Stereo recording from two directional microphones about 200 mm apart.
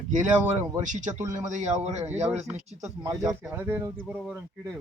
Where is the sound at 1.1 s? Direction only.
15° right (ahead or behind).